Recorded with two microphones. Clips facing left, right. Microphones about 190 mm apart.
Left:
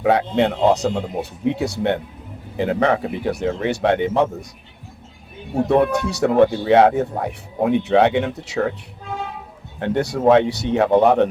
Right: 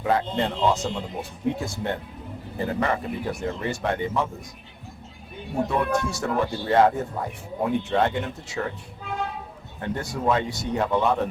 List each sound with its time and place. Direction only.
0.0 s speech: 70° left (ahead or behind)
5.8 s speech: 70° left (ahead or behind)
9.8 s speech: 70° left (ahead or behind)